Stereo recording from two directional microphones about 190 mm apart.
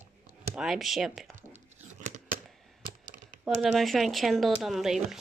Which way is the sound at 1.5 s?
40° right (ahead or behind).